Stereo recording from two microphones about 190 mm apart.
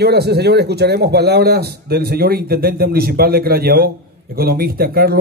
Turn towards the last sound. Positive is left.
turn(degrees=-55)  # may be behind; listen again after turning